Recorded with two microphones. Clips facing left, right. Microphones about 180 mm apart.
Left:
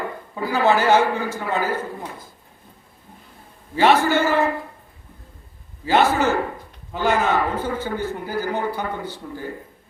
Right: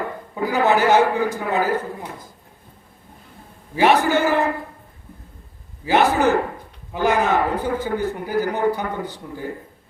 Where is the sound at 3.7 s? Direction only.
15° right (ahead or behind).